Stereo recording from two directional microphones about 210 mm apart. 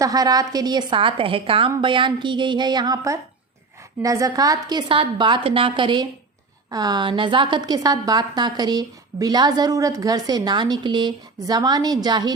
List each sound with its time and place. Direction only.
0.0 s a woman's voice: 15° right (ahead or behind)